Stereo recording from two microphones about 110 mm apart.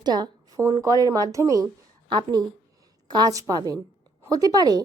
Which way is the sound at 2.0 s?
40° right (ahead or behind).